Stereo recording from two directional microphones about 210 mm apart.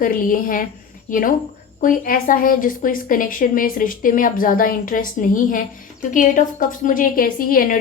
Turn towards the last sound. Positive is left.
turn(degrees=40)  # may be behind; listen again after turning